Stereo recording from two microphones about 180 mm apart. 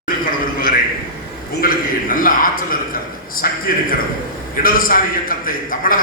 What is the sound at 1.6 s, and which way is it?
A man's voice, 50° left (ahead or behind).